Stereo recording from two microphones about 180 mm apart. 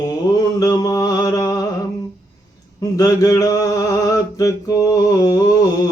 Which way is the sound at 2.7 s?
20° left (ahead or behind).